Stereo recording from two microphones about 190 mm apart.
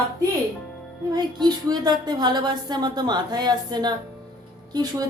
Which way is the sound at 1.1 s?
20° right (ahead or behind).